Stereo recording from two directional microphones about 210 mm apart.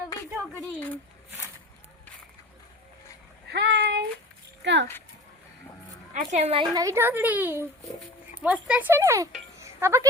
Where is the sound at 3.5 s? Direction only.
55° right (ahead or behind).